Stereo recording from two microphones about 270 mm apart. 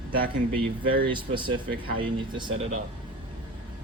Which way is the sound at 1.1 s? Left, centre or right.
Centre.